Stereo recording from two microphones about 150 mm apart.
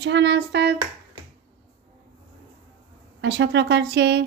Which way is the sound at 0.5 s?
90° right.